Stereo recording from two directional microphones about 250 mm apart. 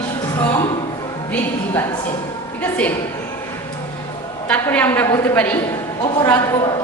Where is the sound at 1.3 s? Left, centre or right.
Centre.